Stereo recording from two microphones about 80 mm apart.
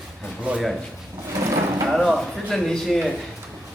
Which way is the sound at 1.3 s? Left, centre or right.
Right.